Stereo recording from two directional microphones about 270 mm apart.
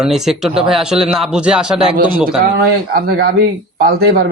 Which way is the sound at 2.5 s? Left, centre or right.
Right.